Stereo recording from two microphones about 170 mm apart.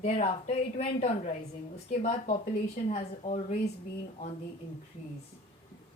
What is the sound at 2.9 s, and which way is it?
Speech, 50° left (ahead or behind).